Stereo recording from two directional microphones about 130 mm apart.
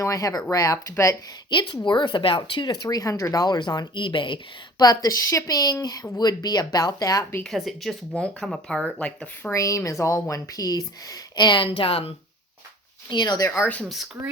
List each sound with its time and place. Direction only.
0.0 s speech: 25° left (ahead or behind)
1.5 s speech: 35° left (ahead or behind)
5.0 s speech: 25° left (ahead or behind)
7.4 s speech: centre (ahead or behind)
9.5 s speech: 25° left (ahead or behind); by 12.1 s 45° left (ahead or behind)
13.1 s speech: 35° left (ahead or behind)
13.7 s speech: 10° left (ahead or behind)